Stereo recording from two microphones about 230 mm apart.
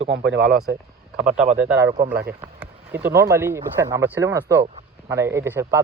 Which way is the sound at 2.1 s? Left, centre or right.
Right.